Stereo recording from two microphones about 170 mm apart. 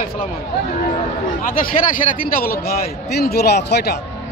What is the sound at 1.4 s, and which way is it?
A man's voice, 55° left (ahead or behind).